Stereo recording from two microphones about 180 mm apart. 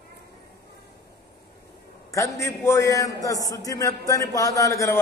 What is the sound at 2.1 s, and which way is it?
A man's voice, 15° left (ahead or behind).